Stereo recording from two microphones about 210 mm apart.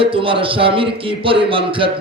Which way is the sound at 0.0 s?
25° right (ahead or behind).